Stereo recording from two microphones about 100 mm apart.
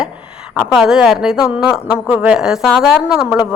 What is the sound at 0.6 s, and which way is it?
A woman's voice, 5° right (ahead or behind).